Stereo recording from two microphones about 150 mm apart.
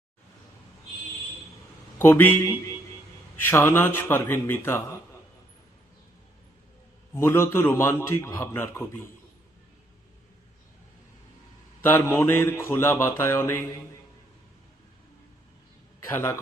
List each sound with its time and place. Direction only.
2.0 s speech: 15° left (ahead or behind)
7.1 s speech: 15° left (ahead or behind)
11.8 s speech: 15° left (ahead or behind)
16.1 s speech: 15° left (ahead or behind)